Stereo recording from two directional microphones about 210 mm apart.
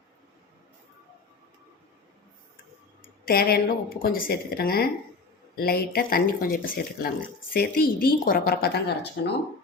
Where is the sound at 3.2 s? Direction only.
45° left (ahead or behind).